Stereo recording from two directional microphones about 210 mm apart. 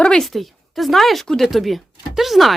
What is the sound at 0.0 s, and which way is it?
Speech, 5° left (ahead or behind).